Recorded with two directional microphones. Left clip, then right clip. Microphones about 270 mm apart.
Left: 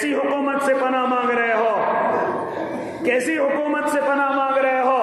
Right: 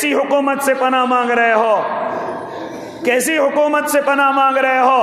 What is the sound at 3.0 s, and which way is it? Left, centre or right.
A man's voice, right.